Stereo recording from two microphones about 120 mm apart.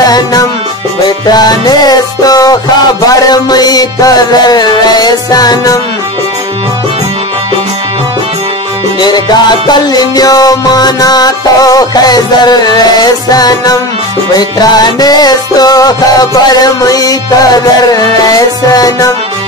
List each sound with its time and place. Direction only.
0.0 s music: 35° left (ahead or behind)
9.0 s music: 35° left (ahead or behind)